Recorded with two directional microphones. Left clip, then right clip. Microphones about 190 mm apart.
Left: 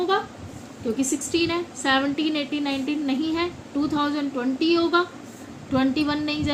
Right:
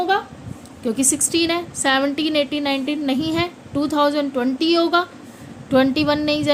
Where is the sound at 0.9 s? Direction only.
65° right (ahead or behind).